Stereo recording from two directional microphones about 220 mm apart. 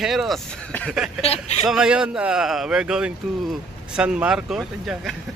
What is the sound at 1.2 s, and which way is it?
Speech, 25° left (ahead or behind).